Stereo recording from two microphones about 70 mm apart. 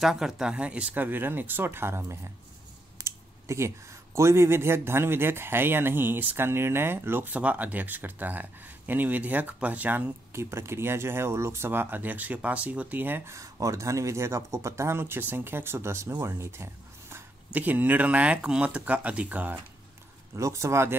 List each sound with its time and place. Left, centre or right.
0.0 s speech: centre
0.9 s speech: right
10.5 s speech: right
13.3 s speech: right
17.5 s speech: right
20.3 s speech: right